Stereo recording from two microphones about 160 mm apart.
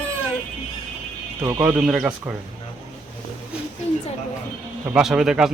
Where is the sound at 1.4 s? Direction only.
20° right (ahead or behind).